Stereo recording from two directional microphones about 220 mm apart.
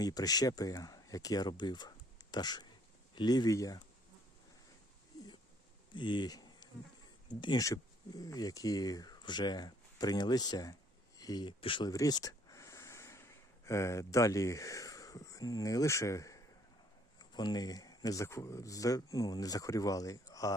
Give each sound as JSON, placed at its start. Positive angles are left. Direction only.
{"t": 0.0, "sound": "speech", "side_deg": 15}
{"t": 5.9, "sound": "insect", "side_deg": 20}
{"t": 7.3, "sound": "speech", "side_deg": 20}
{"t": 11.2, "sound": "a sound", "side_deg": 20}
{"t": 13.7, "sound": "speech", "side_deg": 15}